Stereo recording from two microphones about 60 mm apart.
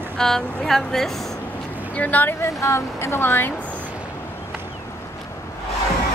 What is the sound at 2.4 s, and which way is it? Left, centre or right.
Speech, left.